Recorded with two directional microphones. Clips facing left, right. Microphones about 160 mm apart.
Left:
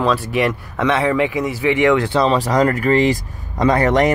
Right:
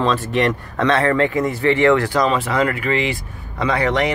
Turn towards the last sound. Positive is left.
turn(degrees=45)  # may be behind; listen again after turning